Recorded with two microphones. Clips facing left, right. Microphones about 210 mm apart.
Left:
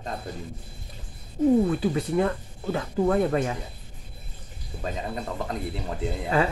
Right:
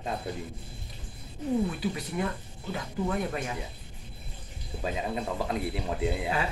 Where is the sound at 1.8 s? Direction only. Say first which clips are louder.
Left 7 dB; 50° left (ahead or behind).